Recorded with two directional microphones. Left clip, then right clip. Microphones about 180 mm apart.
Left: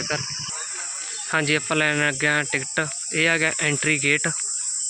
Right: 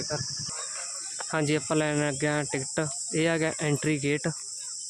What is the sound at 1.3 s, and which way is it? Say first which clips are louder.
Speech: left 6 dB; 10° right (ahead or behind).